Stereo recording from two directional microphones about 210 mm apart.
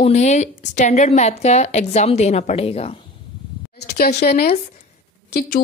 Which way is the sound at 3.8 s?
50° left (ahead or behind).